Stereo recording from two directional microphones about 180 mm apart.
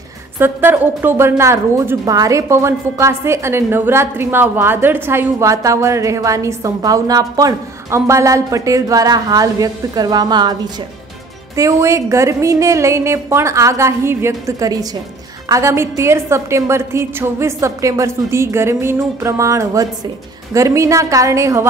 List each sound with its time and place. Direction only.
0.4 s a woman's voice: 10° right (ahead or behind)
11.5 s a woman's voice: 15° right (ahead or behind)